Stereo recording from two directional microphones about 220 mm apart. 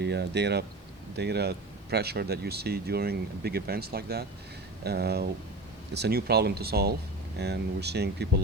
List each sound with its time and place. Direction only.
0.0 s speech: 50° right (ahead or behind)